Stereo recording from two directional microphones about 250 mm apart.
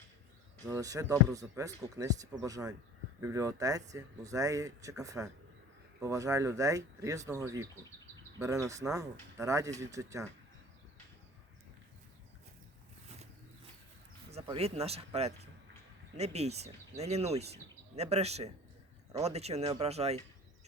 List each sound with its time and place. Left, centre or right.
0.6 s speech: centre
14.3 s speech: right